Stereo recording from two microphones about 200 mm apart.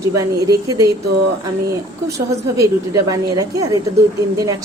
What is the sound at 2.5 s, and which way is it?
A woman's voice, 15° right (ahead or behind).